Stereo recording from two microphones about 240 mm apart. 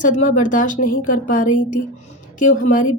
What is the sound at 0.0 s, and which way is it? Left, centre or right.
A woman's voice, left.